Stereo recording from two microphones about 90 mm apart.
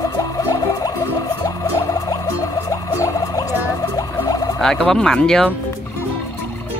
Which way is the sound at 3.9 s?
45° left (ahead or behind).